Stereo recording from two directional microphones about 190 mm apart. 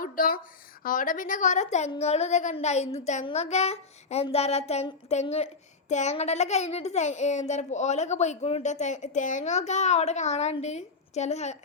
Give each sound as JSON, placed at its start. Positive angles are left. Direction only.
{"t": 0.0, "sound": "a woman's voice", "side_deg": 45}